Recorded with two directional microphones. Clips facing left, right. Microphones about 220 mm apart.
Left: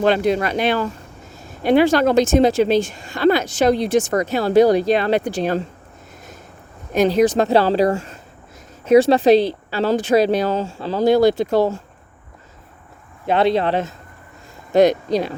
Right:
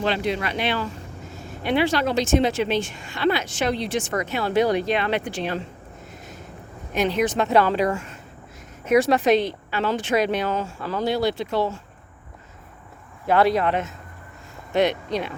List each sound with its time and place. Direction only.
0.0 s speech: 45° left (ahead or behind)
6.9 s speech: 40° left (ahead or behind)
11.0 s speech: 45° left (ahead or behind)
13.2 s speech: 25° left (ahead or behind)